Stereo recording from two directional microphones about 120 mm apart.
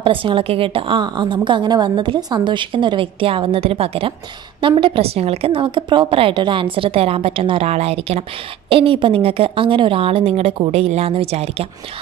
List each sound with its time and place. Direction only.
0.0 s a woman's voice: 45° right (ahead or behind)